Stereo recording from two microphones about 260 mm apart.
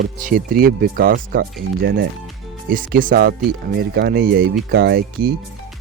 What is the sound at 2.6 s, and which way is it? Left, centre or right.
Speech, right.